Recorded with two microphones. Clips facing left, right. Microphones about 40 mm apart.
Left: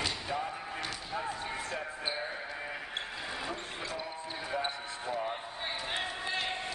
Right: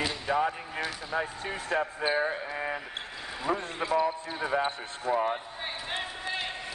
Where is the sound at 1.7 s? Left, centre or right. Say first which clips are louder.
Right 15 dB; right.